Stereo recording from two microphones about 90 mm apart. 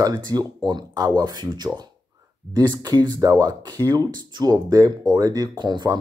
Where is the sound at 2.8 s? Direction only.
50° right (ahead or behind).